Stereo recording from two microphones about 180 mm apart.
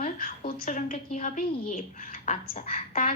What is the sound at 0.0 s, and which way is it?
A woman's voice, 50° left (ahead or behind).